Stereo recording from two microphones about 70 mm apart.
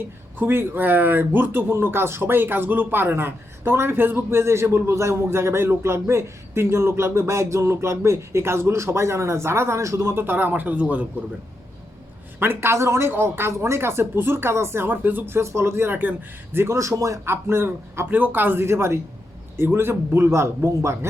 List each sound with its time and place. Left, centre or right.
0.3 s speech: right
10.2 s speech: right
12.4 s speech: right
16.7 s a man's voice: right
17.3 s speech: right